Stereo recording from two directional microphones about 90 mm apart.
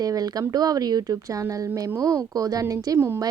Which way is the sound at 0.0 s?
45° right (ahead or behind).